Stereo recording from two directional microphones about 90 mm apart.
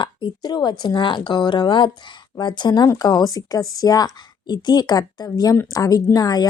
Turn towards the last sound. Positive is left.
turn(degrees=45)  # may be behind; listen again after turning